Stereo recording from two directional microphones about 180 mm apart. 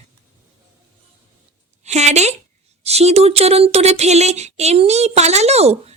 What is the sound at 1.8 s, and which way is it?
Child singing, 40° right (ahead or behind).